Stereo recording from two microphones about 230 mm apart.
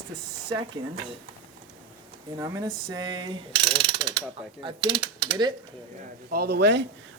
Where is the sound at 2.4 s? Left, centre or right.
Centre.